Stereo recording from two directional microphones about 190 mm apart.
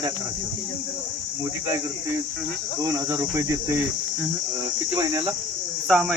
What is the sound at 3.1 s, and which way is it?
Cricket, 15° right (ahead or behind).